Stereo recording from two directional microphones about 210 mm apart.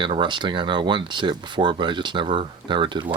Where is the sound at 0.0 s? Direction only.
20° right (ahead or behind).